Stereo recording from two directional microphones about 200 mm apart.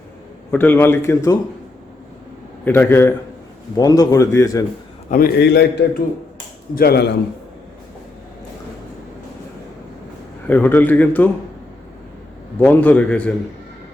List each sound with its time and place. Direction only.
0.5 s a man's voice: 10° left (ahead or behind)
2.6 s a man's voice: 10° left (ahead or behind)
5.1 s a man's voice: 50° left (ahead or behind)
10.4 s a man's voice: 10° left (ahead or behind)
12.5 s a man's voice: 10° left (ahead or behind)